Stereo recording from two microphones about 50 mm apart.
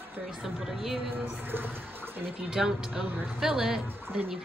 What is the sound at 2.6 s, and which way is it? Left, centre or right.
Speech, centre.